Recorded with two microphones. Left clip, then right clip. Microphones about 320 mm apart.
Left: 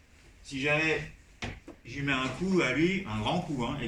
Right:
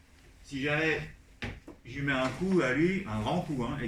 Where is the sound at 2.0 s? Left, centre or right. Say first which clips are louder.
Even; centre.